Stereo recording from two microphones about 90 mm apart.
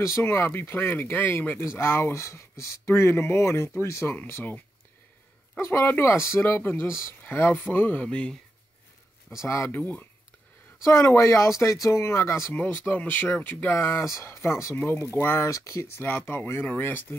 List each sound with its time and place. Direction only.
0.0 s speech: 30° left (ahead or behind)
5.6 s speech: 25° left (ahead or behind)
9.4 s speech: 35° left (ahead or behind)
9.7 s speech: 20° left (ahead or behind)
10.8 s speech: 35° left (ahead or behind)